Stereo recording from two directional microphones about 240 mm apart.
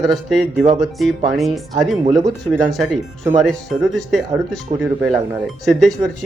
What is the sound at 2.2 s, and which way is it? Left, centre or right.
Speech, centre.